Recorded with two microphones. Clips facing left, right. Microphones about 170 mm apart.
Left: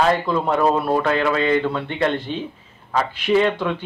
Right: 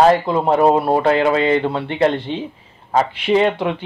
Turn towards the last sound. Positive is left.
turn(degrees=-20)  # may be behind; listen again after turning